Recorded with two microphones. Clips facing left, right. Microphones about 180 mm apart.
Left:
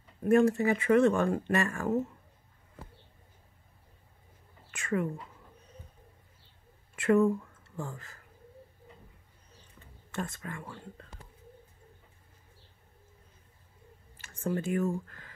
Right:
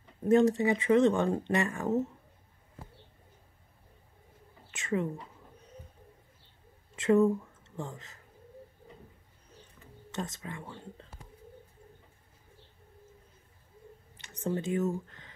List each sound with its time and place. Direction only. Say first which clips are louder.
0.2 s speech: even; 20° right (ahead or behind)
4.6 s speech: even; 20° right (ahead or behind)
7.0 s speech: even; 20° right (ahead or behind)
10.1 s speech: left 1 dB; 20° right (ahead or behind)
14.1 s speech: even; 20° right (ahead or behind)